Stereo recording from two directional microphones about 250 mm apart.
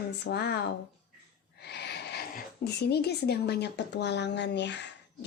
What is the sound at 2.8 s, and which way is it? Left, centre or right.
A woman's voice, left.